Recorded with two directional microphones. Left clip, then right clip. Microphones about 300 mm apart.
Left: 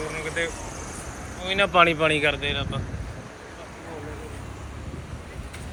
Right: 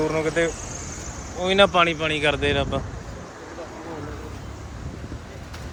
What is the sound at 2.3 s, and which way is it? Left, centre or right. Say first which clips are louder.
Speech: right 5 dB; centre.